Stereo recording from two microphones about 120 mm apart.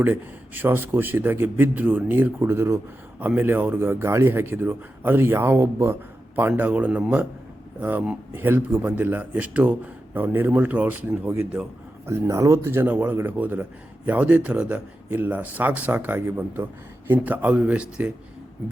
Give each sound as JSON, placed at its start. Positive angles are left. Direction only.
{"t": 0.0, "sound": "a man's voice", "side_deg": -15}